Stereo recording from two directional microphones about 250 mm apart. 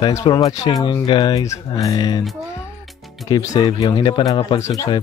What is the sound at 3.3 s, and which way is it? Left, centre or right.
Speech, centre.